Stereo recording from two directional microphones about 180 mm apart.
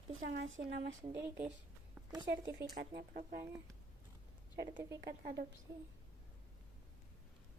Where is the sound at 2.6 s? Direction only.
60° right (ahead or behind).